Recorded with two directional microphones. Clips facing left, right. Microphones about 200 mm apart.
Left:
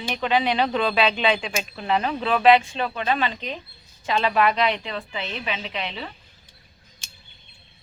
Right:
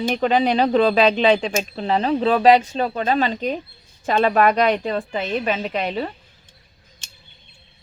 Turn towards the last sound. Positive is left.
turn(degrees=-45)  # may be behind; listen again after turning